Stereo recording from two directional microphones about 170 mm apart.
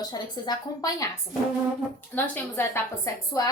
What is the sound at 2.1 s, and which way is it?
A woman's voice, 10° left (ahead or behind).